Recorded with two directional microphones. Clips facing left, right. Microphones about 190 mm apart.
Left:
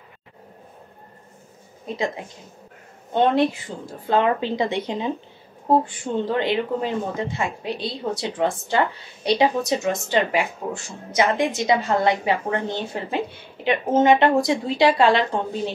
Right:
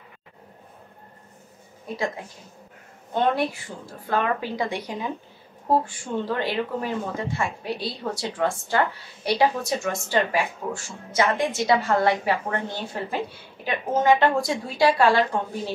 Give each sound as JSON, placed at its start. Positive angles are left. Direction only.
{"t": 1.9, "sound": "speech", "side_deg": 20}
{"t": 3.2, "sound": "speech", "side_deg": 20}